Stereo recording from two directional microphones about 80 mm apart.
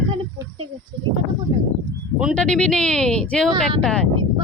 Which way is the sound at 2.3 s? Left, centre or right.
Centre.